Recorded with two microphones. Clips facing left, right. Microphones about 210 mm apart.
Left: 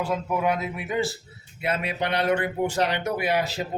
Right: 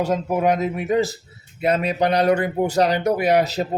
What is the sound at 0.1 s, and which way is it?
A man's voice, 40° right (ahead or behind).